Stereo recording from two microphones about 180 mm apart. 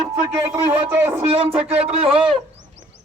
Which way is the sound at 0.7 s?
10° right (ahead or behind).